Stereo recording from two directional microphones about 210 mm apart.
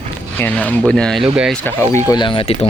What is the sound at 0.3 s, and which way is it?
Speech, 5° left (ahead or behind).